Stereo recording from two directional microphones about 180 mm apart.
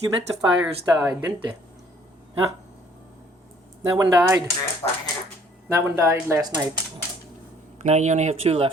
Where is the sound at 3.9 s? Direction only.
15° right (ahead or behind).